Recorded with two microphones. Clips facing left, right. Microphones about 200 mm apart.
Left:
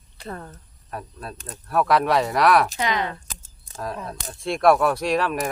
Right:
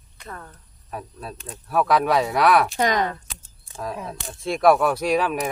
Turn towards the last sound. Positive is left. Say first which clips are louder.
# right 1 dB
turn(degrees=0)  # may be behind; listen again after turning